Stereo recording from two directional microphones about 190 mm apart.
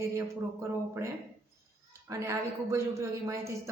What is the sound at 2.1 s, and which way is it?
A man's voice, 15° right (ahead or behind).